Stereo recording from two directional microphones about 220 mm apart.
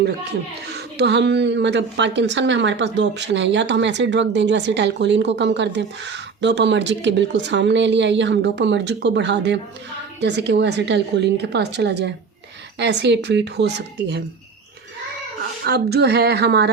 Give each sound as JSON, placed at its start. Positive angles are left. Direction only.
{"t": 0.7, "sound": "speech", "side_deg": -50}
{"t": 15.6, "sound": "speech", "side_deg": -45}